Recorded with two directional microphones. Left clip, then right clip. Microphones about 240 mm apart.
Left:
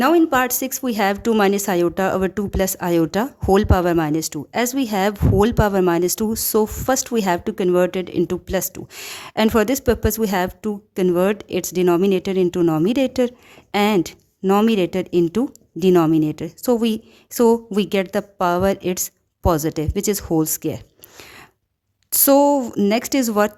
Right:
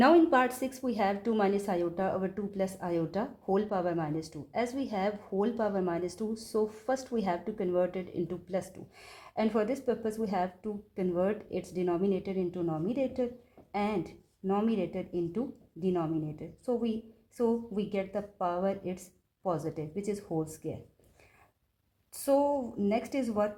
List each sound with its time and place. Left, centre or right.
0.0 s a woman's voice: left
22.1 s a woman's voice: left